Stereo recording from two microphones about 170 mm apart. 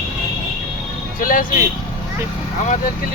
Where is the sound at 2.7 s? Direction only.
50° left (ahead or behind).